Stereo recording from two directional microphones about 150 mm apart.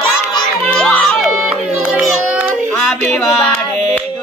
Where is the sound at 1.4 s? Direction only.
5° right (ahead or behind).